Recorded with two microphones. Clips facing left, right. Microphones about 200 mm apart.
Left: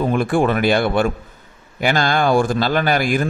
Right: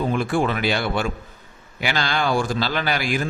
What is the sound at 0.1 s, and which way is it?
A man's voice, 50° left (ahead or behind).